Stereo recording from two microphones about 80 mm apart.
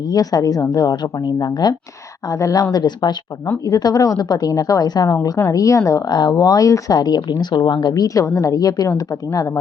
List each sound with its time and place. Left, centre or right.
0.1 s speech: left
2.7 s speech: left
3.7 s speech: left